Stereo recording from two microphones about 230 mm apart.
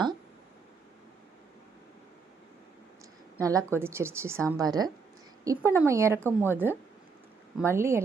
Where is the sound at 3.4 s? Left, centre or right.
Centre.